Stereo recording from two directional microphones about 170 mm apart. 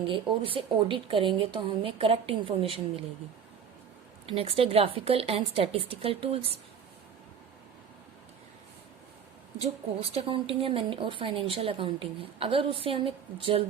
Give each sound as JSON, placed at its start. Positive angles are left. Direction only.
{"t": 0.1, "sound": "a woman's voice", "side_deg": -30}
{"t": 4.3, "sound": "a woman's voice", "side_deg": -35}
{"t": 9.6, "sound": "a woman's voice", "side_deg": -35}